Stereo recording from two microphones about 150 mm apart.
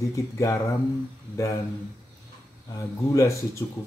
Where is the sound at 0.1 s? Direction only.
20° left (ahead or behind).